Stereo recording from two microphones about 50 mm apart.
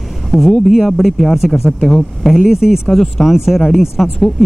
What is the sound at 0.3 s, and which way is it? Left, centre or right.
Speech, centre.